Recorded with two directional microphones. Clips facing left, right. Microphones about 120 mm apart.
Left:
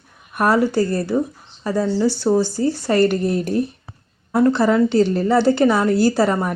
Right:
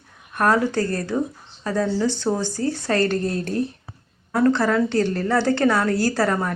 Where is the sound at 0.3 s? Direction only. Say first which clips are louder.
Left 3 dB; 10° left (ahead or behind).